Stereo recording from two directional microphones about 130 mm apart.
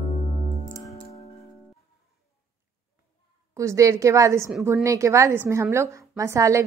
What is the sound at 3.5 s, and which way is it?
A woman's voice, 25° right (ahead or behind).